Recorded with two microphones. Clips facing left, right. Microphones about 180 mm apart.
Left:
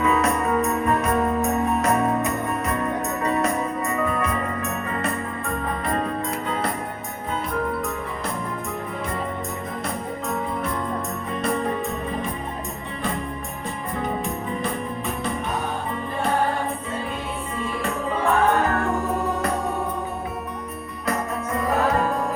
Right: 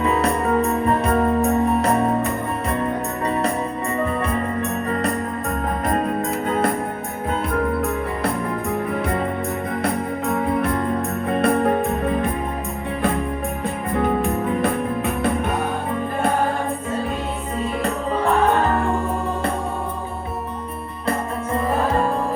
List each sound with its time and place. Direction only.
0.0 s music: 30° right (ahead or behind)
5.8 s music: 45° right (ahead or behind)
9.8 s organ: 60° right (ahead or behind)
13.9 s music: 60° right (ahead or behind)
21.1 s music: 30° right (ahead or behind)